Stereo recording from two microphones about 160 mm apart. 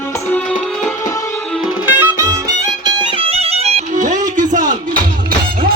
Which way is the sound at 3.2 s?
40° right (ahead or behind).